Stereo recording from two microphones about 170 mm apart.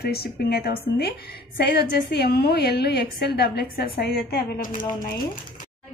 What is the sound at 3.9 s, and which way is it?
Speech, 55° left (ahead or behind).